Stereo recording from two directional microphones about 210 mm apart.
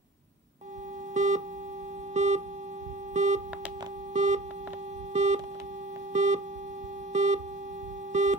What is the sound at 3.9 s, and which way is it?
Busy signal, 35° right (ahead or behind).